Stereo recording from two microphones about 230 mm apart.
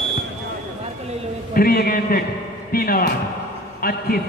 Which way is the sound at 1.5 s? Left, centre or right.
Left.